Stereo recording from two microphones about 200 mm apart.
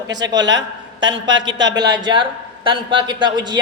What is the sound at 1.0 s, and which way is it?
Speech, 70° right (ahead or behind).